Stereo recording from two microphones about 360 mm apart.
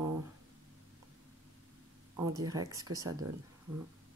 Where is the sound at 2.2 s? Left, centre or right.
Centre.